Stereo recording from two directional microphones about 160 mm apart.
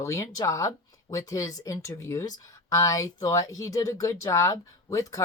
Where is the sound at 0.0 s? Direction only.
20° left (ahead or behind).